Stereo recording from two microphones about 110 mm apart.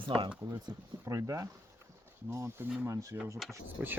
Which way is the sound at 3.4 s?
Centre (ahead or behind).